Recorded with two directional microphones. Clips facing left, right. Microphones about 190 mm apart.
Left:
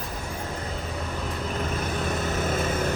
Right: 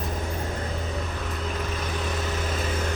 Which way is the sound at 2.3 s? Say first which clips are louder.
Left 3 dB; 50° left (ahead or behind).